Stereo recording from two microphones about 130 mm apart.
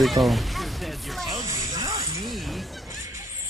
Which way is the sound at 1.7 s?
25° right (ahead or behind).